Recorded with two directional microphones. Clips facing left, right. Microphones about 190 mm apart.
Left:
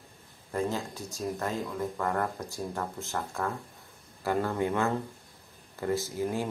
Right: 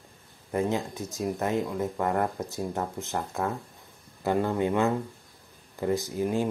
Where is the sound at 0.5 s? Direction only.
20° right (ahead or behind).